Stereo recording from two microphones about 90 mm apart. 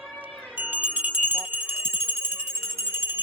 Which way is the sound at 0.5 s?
20° right (ahead or behind).